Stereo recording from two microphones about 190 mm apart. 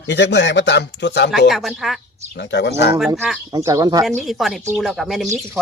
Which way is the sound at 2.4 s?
65° left (ahead or behind).